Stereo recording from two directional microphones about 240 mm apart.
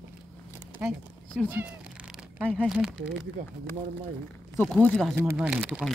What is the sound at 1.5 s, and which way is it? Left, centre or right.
Speech, centre.